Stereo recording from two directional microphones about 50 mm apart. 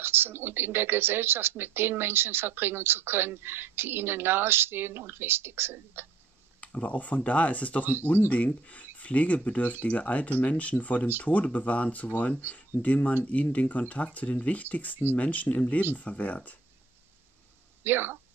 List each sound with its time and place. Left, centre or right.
0.0 s speech: right
6.6 s speech: left
7.8 s speech: right
8.3 s speech: left
17.8 s speech: right